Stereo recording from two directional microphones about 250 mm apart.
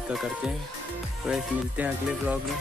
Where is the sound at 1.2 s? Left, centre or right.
Centre.